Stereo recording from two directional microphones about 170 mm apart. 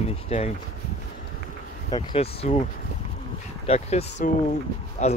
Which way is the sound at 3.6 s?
40° left (ahead or behind).